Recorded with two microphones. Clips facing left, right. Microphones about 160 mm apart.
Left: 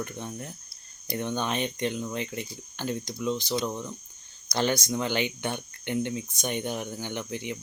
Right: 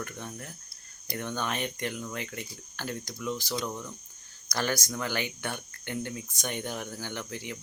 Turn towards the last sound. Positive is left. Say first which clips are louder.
# left 4 dB
turn(degrees=20)  # may be behind; listen again after turning